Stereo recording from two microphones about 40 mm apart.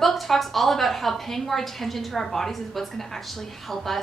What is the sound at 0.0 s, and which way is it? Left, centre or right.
A woman's voice, centre.